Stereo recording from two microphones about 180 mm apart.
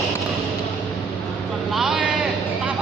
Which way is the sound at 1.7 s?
5° right (ahead or behind).